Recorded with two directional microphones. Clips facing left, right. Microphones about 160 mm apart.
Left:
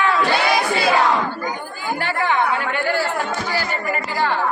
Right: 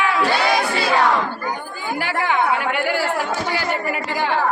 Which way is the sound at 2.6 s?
15° right (ahead or behind).